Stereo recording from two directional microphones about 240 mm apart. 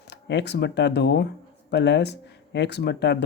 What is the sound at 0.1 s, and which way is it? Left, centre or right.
Speech, left.